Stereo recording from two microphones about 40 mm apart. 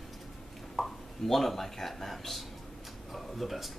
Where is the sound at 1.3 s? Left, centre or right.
Centre.